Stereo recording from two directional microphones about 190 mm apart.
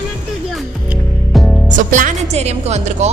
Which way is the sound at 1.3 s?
Centre (ahead or behind).